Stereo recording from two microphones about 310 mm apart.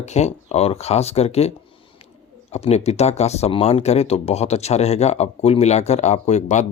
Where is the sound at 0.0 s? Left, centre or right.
Left.